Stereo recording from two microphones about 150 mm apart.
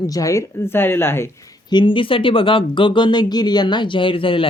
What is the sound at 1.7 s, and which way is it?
Speech, 30° left (ahead or behind).